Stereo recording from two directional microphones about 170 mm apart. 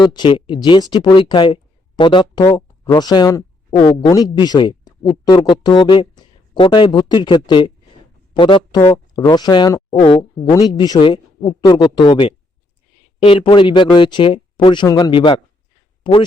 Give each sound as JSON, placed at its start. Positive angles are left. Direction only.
{"t": 0.0, "sound": "speech", "side_deg": 25}